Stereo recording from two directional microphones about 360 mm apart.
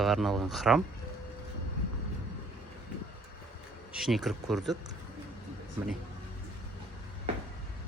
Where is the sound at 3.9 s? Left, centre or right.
Centre.